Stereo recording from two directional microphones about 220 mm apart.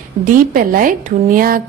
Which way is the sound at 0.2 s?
40° right (ahead or behind).